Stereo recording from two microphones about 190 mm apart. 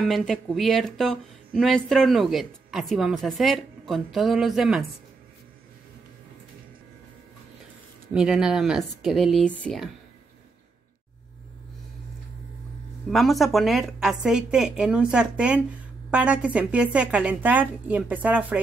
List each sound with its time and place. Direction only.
0.0 s speech: centre (ahead or behind)
8.1 s speech: 5° right (ahead or behind)
13.1 s a woman's voice: centre (ahead or behind)